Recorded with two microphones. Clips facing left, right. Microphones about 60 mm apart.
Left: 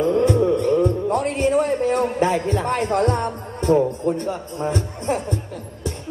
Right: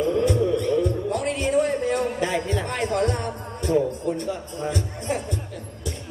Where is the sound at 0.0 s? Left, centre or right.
Left.